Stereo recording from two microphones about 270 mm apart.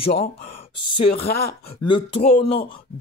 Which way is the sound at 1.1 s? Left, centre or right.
Left.